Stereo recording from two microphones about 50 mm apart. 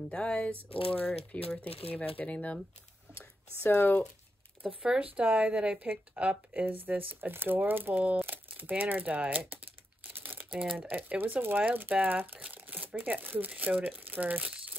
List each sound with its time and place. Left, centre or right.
0.1 s speech: centre
3.6 s speech: left
4.8 s speech: right
6.6 s speech: right
10.1 s crumpling: right
10.9 s speech: right
12.5 s crumpling: right
13.6 s speech: right